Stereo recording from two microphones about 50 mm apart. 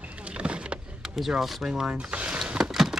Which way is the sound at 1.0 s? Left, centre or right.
Centre.